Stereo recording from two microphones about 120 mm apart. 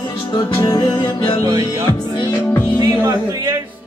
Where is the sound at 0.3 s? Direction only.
25° left (ahead or behind).